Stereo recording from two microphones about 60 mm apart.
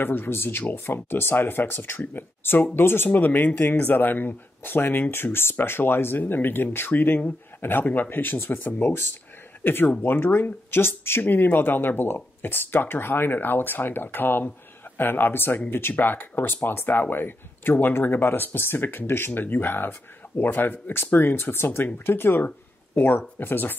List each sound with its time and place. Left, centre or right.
0.0 s speech: left